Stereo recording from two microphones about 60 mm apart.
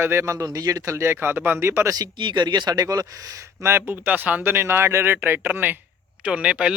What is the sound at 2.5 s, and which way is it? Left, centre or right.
Speech, right.